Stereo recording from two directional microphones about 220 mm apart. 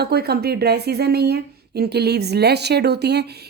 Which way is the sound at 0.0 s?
45° right (ahead or behind).